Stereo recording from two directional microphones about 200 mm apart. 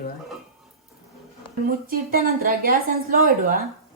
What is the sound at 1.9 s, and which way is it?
Speech, 45° right (ahead or behind).